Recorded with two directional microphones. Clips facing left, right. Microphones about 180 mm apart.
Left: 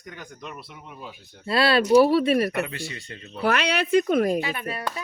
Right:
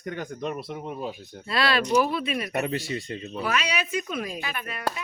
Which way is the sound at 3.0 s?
20° right (ahead or behind).